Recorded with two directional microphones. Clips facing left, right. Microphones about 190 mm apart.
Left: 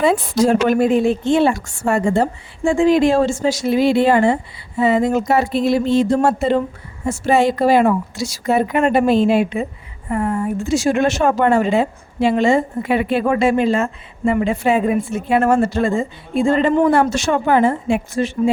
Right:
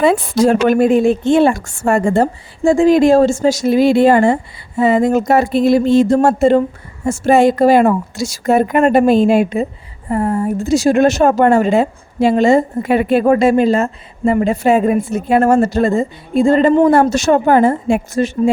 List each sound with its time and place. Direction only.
0.0 s a woman's voice: 60° right (ahead or behind); by 18.5 s 45° right (ahead or behind)